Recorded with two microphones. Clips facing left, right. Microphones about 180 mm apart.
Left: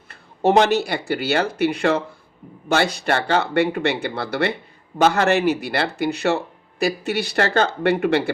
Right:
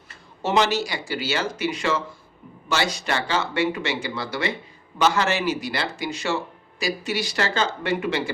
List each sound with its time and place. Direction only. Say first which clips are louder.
0.1 s speech: left 7 dB; 55° left (ahead or behind)